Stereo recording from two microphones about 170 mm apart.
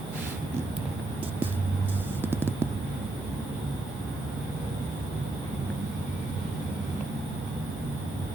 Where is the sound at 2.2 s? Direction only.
15° right (ahead or behind).